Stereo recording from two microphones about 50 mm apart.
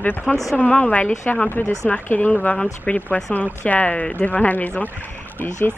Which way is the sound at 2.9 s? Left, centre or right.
Left.